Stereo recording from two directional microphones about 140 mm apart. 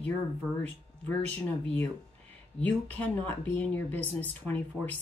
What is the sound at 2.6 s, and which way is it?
Speech, 10° left (ahead or behind).